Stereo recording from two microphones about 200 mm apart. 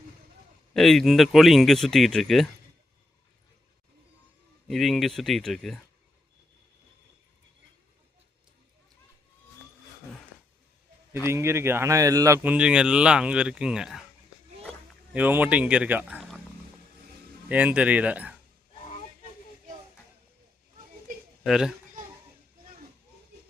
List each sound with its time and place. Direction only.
0.7 s speech: centre (ahead or behind)
4.7 s speech: centre (ahead or behind)
11.3 s speech: 15° right (ahead or behind)
15.1 s speech: 10° right (ahead or behind)
17.5 s speech: 5° right (ahead or behind)
18.7 s a sound: 30° left (ahead or behind)
21.4 s speech: centre (ahead or behind)